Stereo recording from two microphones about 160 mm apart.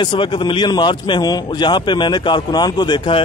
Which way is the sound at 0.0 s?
30° left (ahead or behind).